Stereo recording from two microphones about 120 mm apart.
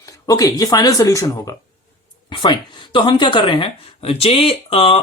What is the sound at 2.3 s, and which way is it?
Speech, 40° left (ahead or behind).